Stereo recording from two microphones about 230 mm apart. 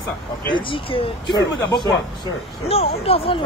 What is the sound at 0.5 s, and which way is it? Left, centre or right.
Speech, left.